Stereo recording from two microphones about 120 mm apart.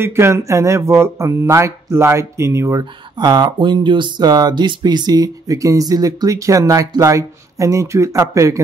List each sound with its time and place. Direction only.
0.0 s speech: 20° right (ahead or behind)
2.8 s speech: 35° right (ahead or behind)